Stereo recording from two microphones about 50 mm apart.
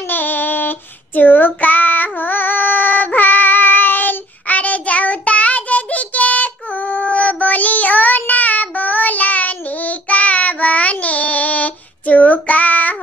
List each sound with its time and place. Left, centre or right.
0.1 s child singing: left